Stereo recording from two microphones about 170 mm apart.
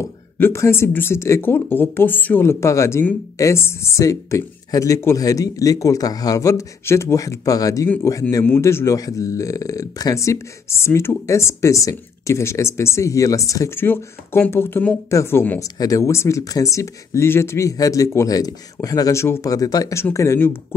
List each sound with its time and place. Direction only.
0.0 s speech: 15° left (ahead or behind)